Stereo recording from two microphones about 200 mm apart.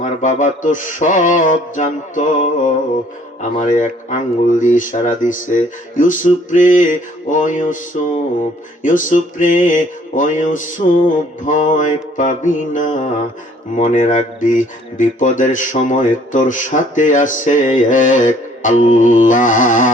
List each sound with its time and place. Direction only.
0.0 s speech: 40° left (ahead or behind)
3.5 s speech: 40° left (ahead or behind)